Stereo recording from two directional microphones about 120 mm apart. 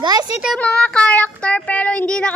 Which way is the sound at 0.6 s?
10° left (ahead or behind).